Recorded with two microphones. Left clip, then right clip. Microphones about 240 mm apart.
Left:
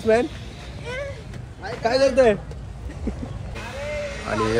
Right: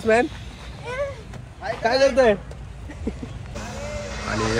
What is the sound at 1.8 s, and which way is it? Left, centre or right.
Speech, right.